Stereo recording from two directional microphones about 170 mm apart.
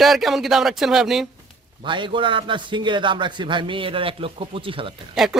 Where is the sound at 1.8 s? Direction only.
30° right (ahead or behind).